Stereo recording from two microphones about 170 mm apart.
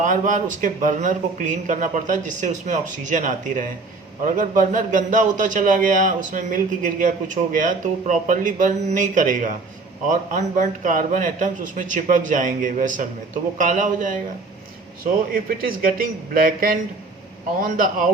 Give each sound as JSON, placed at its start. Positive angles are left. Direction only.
{"t": 0.0, "sound": "a man's voice", "side_deg": -50}